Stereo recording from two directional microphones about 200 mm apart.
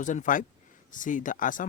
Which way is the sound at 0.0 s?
40° left (ahead or behind).